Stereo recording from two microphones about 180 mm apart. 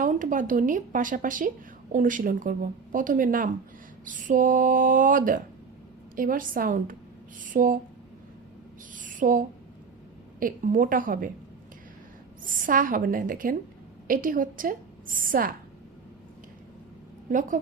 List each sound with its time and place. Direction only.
0.0 s a woman's voice: 45° right (ahead or behind)
9.0 s a sound: 45° right (ahead or behind)
10.4 s a woman's voice: 45° right (ahead or behind)
12.5 s a woman's voice: 50° right (ahead or behind)
17.2 s a woman's voice: 50° right (ahead or behind)